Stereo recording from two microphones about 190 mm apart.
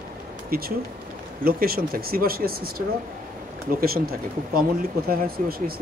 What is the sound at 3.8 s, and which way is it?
Speech, 50° right (ahead or behind).